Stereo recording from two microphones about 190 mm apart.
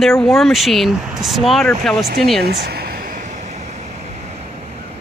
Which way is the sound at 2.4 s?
55° right (ahead or behind).